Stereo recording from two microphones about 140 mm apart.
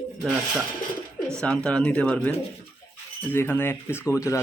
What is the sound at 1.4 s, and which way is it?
Speech, 5° left (ahead or behind).